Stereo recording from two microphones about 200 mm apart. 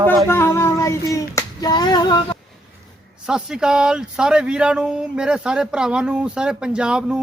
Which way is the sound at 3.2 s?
5° right (ahead or behind).